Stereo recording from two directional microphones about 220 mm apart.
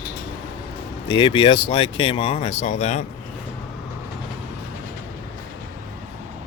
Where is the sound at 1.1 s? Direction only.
20° left (ahead or behind).